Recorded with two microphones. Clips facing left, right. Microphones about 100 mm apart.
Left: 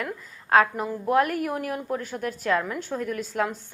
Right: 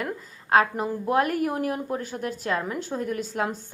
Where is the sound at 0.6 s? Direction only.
30° right (ahead or behind).